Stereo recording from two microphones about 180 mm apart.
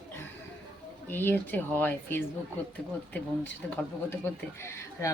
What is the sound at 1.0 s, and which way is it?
Speech, 10° left (ahead or behind).